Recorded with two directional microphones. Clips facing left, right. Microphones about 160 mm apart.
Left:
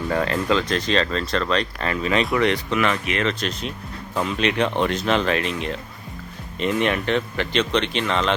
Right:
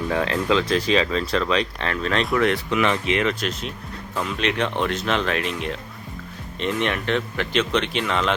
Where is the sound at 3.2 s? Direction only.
5° right (ahead or behind).